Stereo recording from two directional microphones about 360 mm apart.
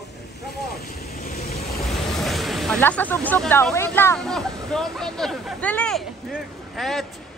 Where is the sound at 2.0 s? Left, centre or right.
Centre.